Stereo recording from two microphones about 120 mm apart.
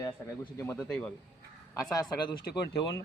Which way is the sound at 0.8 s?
5° left (ahead or behind).